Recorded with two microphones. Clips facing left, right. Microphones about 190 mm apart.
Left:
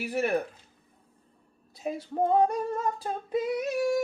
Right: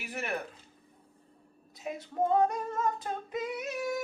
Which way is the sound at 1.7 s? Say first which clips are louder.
Left 5 dB; 35° left (ahead or behind).